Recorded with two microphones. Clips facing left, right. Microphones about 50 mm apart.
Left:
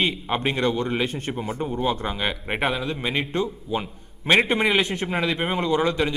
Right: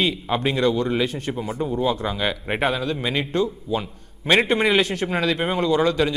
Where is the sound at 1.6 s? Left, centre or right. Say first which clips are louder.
Right 3 dB; centre.